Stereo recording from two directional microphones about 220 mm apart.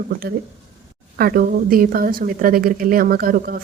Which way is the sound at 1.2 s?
40° right (ahead or behind).